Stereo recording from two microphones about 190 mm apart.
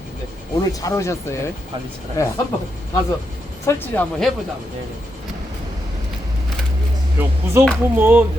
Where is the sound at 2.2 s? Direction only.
15° left (ahead or behind).